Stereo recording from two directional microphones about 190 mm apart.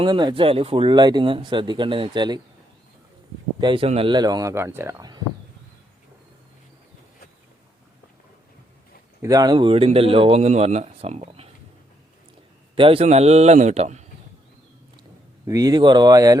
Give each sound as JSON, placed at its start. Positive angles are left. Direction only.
{"t": 0.0, "sound": "speech", "side_deg": -25}
{"t": 3.6, "sound": "speech", "side_deg": -25}
{"t": 9.2, "sound": "speech", "side_deg": -20}
{"t": 12.7, "sound": "speech", "side_deg": -30}
{"t": 15.4, "sound": "speech", "side_deg": -20}